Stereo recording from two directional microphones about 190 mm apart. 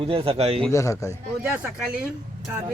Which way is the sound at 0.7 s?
15° left (ahead or behind).